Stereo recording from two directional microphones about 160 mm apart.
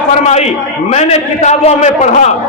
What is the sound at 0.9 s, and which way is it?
A man's voice, 45° left (ahead or behind).